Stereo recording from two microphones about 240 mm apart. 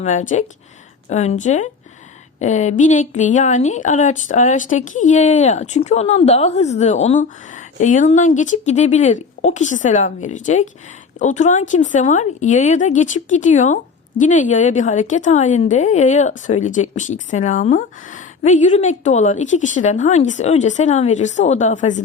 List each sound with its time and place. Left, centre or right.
0.0 s a woman's voice: left